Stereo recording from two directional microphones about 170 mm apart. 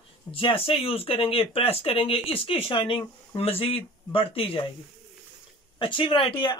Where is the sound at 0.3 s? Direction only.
30° left (ahead or behind).